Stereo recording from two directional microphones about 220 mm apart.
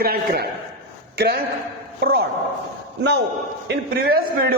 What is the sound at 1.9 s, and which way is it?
Speech, 45° right (ahead or behind).